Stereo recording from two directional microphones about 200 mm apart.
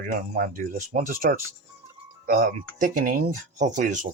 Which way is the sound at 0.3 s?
45° right (ahead or behind).